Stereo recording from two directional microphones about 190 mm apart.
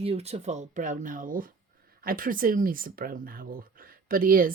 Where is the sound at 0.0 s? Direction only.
35° right (ahead or behind).